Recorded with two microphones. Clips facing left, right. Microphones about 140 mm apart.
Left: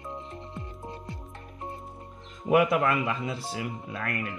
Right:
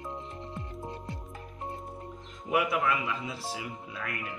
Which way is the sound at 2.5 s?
55° left (ahead or behind).